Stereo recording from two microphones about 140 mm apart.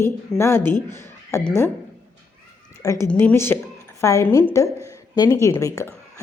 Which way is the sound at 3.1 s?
15° left (ahead or behind).